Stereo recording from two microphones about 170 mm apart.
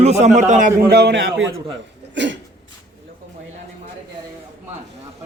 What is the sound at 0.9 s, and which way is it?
Speech, 75° right (ahead or behind).